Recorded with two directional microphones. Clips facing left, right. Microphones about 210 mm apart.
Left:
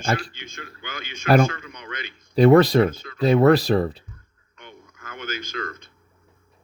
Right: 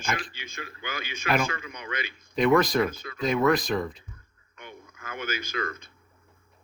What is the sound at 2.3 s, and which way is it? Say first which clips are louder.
Speech: left 7 dB; 35° left (ahead or behind).